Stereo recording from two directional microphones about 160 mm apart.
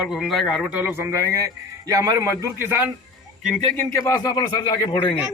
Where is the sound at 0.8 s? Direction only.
15° right (ahead or behind).